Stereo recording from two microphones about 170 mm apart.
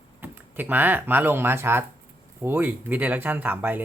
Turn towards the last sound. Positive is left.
turn(degrees=-10)  # may be behind; listen again after turning